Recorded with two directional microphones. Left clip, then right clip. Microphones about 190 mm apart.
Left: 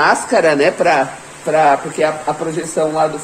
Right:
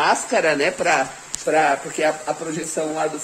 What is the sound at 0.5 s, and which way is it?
Speech, centre (ahead or behind).